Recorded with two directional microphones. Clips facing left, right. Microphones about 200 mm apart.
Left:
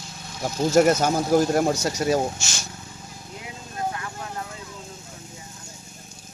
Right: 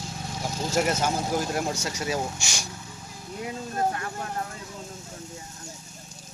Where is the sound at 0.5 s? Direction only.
40° left (ahead or behind).